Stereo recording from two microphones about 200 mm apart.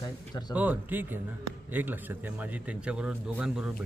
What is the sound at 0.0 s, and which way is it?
Speech, 20° left (ahead or behind).